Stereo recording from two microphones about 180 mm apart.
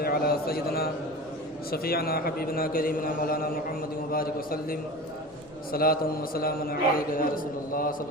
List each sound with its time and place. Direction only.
0.0 s a man's voice: 60° left (ahead or behind)